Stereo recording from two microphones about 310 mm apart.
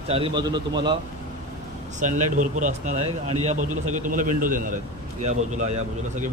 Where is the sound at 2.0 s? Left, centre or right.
Right.